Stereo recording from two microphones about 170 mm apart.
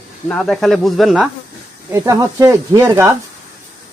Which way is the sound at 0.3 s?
Centre (ahead or behind).